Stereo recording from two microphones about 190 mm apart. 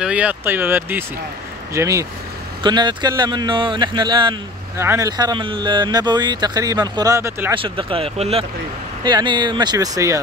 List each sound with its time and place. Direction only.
0.0 s speech: 5° right (ahead or behind)
7.5 s speech: 25° right (ahead or behind)